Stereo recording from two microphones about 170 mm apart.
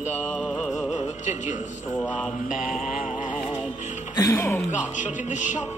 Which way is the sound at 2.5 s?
50° left (ahead or behind).